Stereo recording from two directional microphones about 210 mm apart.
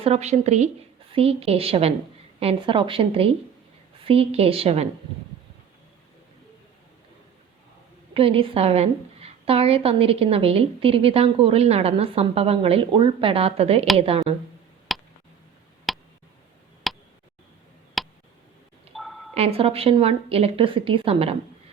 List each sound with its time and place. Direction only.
0.0 s a woman's voice: 30° right (ahead or behind)
8.1 s a woman's voice: 25° right (ahead or behind)
14.9 s tick: centre (ahead or behind)
18.9 s a sound: centre (ahead or behind)
19.3 s a woman's voice: 30° right (ahead or behind)